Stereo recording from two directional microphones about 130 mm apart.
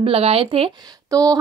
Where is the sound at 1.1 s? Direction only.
25° right (ahead or behind).